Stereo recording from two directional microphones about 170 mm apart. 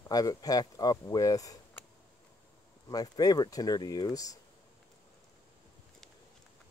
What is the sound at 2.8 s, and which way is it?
Speech, 20° left (ahead or behind).